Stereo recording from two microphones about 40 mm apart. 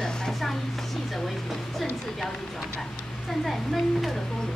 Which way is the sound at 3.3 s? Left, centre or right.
Centre.